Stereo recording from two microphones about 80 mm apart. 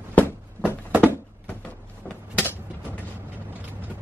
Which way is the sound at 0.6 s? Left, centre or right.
Centre.